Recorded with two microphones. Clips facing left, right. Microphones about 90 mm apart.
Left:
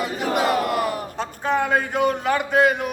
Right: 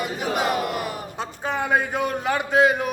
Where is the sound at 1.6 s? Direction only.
5° right (ahead or behind).